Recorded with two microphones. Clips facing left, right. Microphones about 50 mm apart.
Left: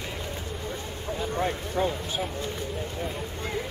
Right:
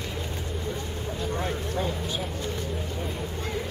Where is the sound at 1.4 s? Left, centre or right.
Centre.